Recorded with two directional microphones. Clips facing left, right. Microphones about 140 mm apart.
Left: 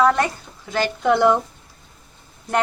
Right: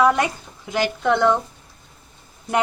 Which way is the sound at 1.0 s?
5° left (ahead or behind).